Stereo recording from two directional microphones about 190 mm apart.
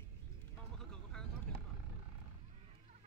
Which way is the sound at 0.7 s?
5° left (ahead or behind).